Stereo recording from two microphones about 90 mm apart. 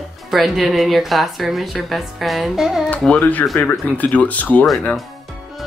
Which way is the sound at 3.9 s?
15° left (ahead or behind).